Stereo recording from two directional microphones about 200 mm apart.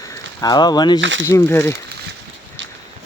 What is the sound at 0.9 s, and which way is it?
Speech, 70° right (ahead or behind).